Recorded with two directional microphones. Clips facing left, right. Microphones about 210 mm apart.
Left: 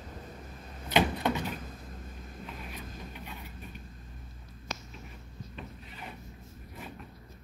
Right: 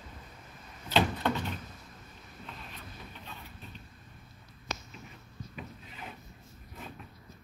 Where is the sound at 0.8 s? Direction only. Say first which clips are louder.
Left 1 dB; 15° left (ahead or behind).